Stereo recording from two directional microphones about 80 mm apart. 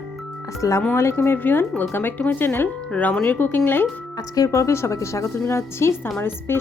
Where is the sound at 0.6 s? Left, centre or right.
Left.